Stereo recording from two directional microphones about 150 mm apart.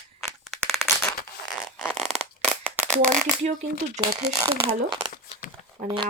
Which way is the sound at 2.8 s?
20° right (ahead or behind).